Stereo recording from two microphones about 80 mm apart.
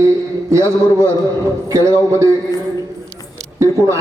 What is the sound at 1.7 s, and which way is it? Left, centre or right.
Speech, right.